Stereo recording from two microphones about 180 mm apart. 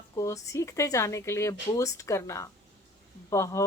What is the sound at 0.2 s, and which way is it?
Speech, 15° left (ahead or behind).